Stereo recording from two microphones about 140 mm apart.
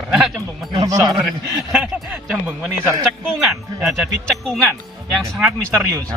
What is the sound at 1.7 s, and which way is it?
Speech, 10° right (ahead or behind).